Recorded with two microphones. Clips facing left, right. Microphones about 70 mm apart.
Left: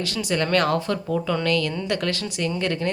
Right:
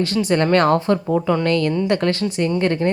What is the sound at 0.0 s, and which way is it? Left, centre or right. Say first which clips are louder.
A woman's voice: right 7 dB; right.